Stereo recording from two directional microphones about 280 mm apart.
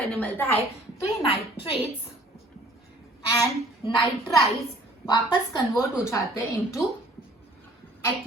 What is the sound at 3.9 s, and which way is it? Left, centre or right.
Speech, centre.